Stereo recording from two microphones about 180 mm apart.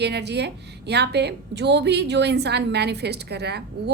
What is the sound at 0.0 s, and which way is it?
A woman's voice, 70° right (ahead or behind).